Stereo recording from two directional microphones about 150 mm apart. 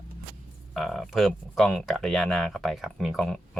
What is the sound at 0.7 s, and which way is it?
Speech, centre (ahead or behind).